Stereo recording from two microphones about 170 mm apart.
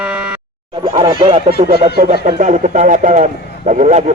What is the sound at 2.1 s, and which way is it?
Speech, 45° right (ahead or behind).